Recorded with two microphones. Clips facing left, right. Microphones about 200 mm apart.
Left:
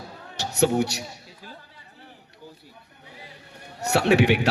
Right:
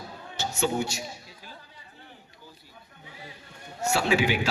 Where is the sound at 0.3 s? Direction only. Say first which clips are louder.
Left 6 dB; 65° left (ahead or behind).